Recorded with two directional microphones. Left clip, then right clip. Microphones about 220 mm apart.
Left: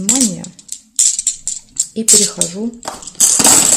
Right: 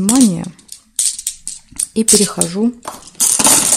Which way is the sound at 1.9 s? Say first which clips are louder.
Even; 30° right (ahead or behind).